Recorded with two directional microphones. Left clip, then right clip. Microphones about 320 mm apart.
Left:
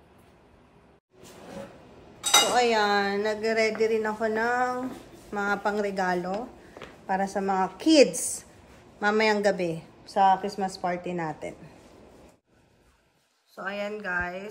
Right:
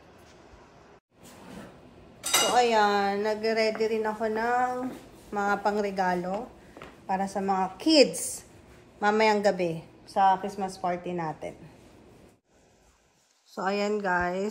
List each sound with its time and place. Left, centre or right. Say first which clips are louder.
2.5 s a woman's voice: even; centre
13.6 s speech: right 5 dB; centre